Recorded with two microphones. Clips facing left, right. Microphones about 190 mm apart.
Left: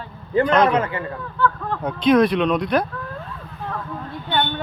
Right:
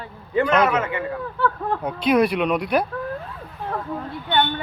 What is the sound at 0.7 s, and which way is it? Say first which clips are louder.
Speech: left 2 dB; 35° left (ahead or behind).